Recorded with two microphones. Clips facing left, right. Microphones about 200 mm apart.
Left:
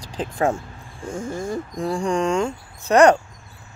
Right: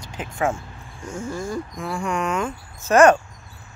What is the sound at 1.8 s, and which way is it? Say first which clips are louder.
Speech: left 6 dB; 30° left (ahead or behind).